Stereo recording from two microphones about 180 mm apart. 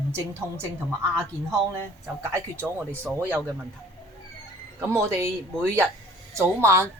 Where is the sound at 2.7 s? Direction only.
10° right (ahead or behind).